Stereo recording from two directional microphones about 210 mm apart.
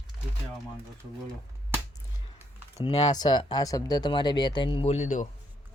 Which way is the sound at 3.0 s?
20° left (ahead or behind).